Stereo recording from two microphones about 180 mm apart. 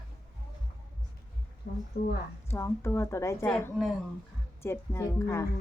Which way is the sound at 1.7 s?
55° left (ahead or behind).